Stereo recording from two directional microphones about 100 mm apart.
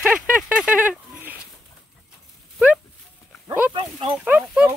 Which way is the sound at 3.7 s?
60° right (ahead or behind).